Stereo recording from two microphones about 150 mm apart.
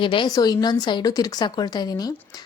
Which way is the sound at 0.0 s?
35° left (ahead or behind).